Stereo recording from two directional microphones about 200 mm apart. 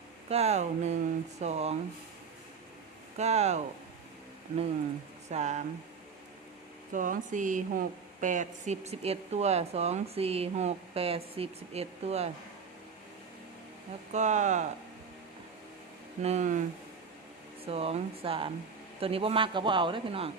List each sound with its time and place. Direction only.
0.3 s a woman's voice: 30° right (ahead or behind)
3.2 s a woman's voice: 35° right (ahead or behind)
5.3 s a woman's voice: 35° right (ahead or behind)
6.9 s a woman's voice: 40° right (ahead or behind)
14.1 s a woman's voice: 35° right (ahead or behind)
16.2 s a woman's voice: 35° right (ahead or behind)
17.7 s a man's voice: 30° right (ahead or behind)